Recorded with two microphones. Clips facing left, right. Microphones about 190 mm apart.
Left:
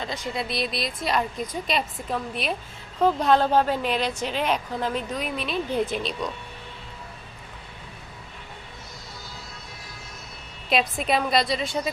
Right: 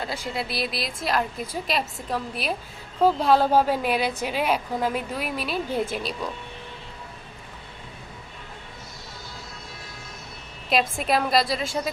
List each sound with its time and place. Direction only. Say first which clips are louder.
0.3 s a woman's voice: left 1 dB; 5° right (ahead or behind)
10.7 s a woman's voice: even; centre (ahead or behind)